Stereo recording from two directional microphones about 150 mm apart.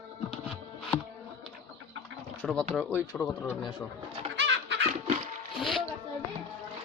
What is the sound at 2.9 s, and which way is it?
Speech, 20° left (ahead or behind).